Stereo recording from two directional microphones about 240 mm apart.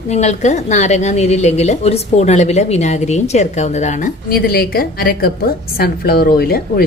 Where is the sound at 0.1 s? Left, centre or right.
Left.